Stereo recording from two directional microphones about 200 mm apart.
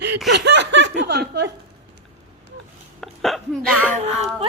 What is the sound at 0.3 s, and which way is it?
Laughter, 60° right (ahead or behind).